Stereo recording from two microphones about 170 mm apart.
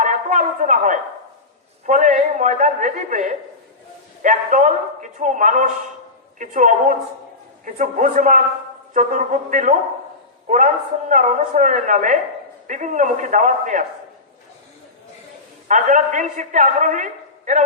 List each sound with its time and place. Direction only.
0.0 s a sound: 50° right (ahead or behind)
1.9 s a man's voice: 45° right (ahead or behind)
11.1 s a man's voice: 50° right (ahead or behind)
15.6 s a man's voice: 50° right (ahead or behind)